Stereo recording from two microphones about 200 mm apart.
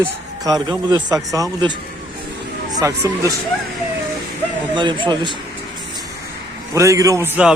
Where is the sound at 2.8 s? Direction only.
15° right (ahead or behind).